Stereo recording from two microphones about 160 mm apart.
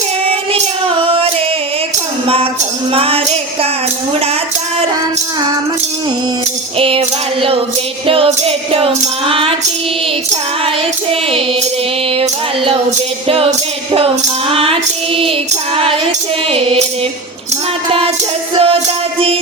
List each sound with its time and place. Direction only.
1.0 s singing: 35° right (ahead or behind)
2.2 s tambourine: 35° right (ahead or behind)
2.9 s music: 35° right (ahead or behind)
6.7 s music: 35° right (ahead or behind)
8.0 s music: 35° right (ahead or behind)
11.1 s music: 35° right (ahead or behind)
12.1 s female singing: 35° right (ahead or behind)
13.2 s music: 35° right (ahead or behind)
14.5 s child singing: 35° right (ahead or behind)
15.7 s music: 35° right (ahead or behind)
17.8 s music: 35° right (ahead or behind)